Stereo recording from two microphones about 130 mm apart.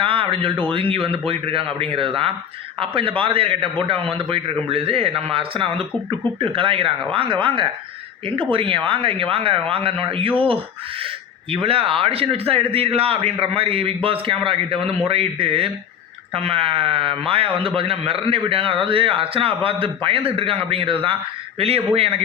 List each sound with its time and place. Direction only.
0.0 s a man's voice: 45° right (ahead or behind)